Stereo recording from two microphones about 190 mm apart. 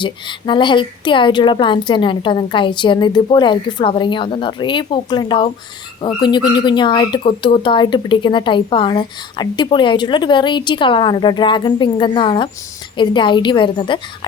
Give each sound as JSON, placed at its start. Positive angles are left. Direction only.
{"t": 0.0, "sound": "speech", "side_deg": 25}